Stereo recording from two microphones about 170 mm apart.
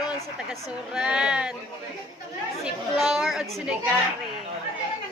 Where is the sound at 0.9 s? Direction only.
5° right (ahead or behind).